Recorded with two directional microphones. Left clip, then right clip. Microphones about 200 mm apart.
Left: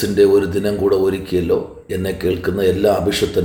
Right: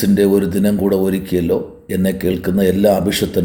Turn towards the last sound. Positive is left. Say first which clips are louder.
# right 1 dB
turn(degrees=-45)  # may be behind; listen again after turning